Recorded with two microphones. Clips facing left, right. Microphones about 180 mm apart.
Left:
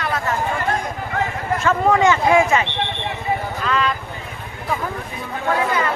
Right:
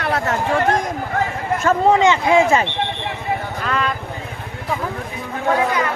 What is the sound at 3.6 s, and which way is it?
Vehicle, 50° right (ahead or behind).